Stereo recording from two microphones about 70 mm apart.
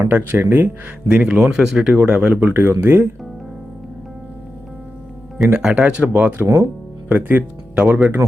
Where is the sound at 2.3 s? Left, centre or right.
Right.